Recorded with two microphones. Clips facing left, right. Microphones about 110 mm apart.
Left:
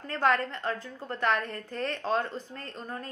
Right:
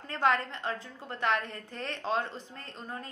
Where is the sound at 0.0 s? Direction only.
20° right (ahead or behind).